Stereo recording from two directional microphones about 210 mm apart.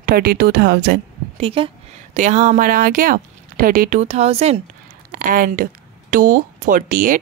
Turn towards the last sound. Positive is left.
turn(degrees=-40)  # may be behind; listen again after turning